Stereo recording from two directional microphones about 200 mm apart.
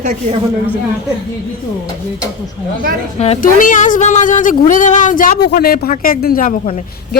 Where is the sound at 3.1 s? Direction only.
30° left (ahead or behind).